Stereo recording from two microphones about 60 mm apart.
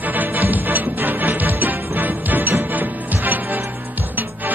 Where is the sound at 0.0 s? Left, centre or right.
Right.